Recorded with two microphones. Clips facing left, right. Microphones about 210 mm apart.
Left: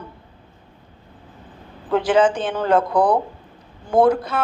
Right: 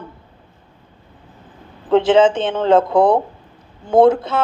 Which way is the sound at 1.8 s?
25° right (ahead or behind).